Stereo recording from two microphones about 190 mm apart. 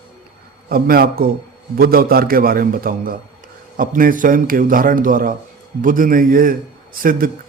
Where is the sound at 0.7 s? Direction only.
50° right (ahead or behind).